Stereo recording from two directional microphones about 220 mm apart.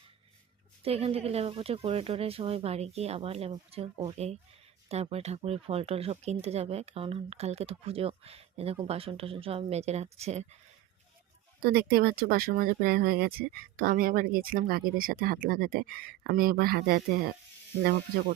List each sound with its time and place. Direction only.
0.8 s speech: 25° right (ahead or behind)
11.6 s speech: 45° right (ahead or behind)